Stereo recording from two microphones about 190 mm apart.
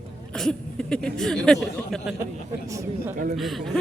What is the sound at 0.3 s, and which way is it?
Speech, 5° left (ahead or behind).